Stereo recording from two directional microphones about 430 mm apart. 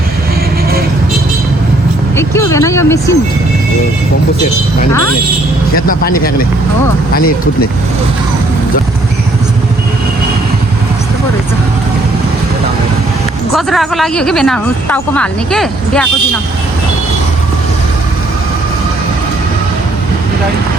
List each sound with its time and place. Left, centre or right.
2.1 s speech: centre
5.7 s speech: centre
13.5 s speech: centre